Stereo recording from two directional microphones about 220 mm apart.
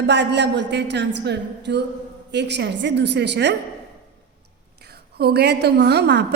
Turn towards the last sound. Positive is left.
turn(degrees=-50)  # may be behind; listen again after turning